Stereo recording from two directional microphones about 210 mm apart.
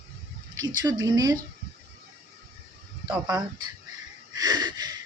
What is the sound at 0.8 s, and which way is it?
Speech, 15° right (ahead or behind).